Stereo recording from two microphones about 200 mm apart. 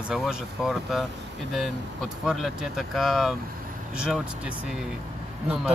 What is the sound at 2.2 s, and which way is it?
Speech, centre (ahead or behind).